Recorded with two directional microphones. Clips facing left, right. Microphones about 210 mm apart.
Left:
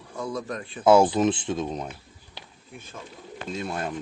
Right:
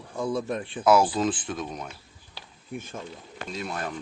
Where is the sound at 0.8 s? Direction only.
25° left (ahead or behind).